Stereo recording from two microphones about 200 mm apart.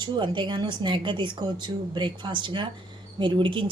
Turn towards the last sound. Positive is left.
turn(degrees=-25)  # may be behind; listen again after turning